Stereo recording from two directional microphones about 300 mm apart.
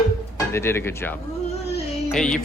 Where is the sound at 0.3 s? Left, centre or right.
Centre.